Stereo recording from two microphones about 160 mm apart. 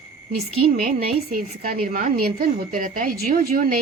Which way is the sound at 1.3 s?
65° right (ahead or behind).